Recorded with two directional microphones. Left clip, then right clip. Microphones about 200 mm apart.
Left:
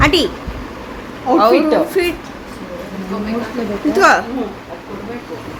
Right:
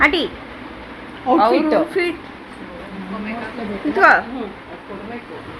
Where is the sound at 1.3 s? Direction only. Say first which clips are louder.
Left 2 dB; 40° right (ahead or behind).